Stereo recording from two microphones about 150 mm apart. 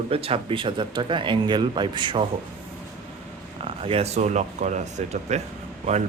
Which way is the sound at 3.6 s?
40° right (ahead or behind).